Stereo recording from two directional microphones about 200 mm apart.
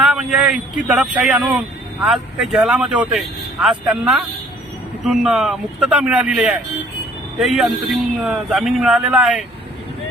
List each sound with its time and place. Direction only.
0.0 s speech: 5° right (ahead or behind)